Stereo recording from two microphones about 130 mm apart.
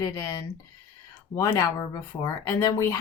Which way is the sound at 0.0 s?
25° left (ahead or behind).